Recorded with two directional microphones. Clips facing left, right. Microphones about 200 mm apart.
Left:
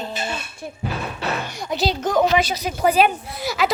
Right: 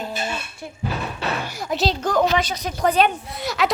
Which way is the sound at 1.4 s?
5° right (ahead or behind).